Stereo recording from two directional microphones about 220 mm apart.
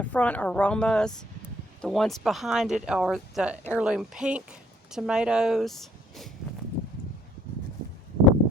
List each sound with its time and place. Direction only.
0.0 s speech: 5° left (ahead or behind)